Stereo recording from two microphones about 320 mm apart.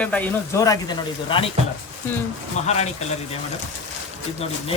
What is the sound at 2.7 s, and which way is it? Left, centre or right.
Speech, centre.